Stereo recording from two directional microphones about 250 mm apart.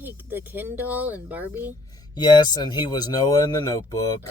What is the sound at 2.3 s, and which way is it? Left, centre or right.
Speech, centre.